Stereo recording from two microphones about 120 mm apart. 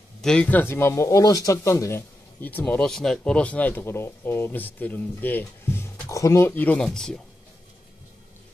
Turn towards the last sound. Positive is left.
turn(degrees=5)  # may be behind; listen again after turning